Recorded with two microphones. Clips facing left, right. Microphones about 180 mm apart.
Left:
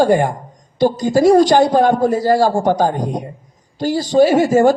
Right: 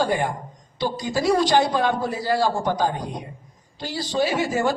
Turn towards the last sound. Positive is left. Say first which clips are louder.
# left 11 dB
turn(degrees=45)  # may be behind; listen again after turning